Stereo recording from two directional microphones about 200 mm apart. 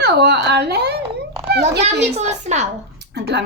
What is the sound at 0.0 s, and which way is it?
Speech, 55° right (ahead or behind).